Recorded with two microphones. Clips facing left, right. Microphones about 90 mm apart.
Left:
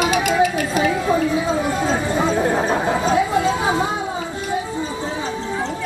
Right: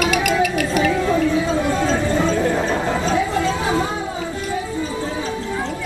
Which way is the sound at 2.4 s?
40° left (ahead or behind).